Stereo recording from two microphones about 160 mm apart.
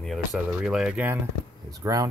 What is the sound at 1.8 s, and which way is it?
Speech, 25° right (ahead or behind).